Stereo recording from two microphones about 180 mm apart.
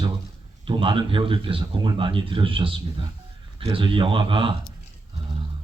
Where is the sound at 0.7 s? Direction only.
30° right (ahead or behind).